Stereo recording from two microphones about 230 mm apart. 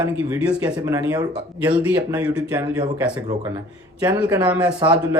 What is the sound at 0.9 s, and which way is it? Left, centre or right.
Speech, centre.